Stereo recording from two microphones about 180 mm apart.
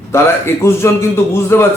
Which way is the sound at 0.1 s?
15° left (ahead or behind).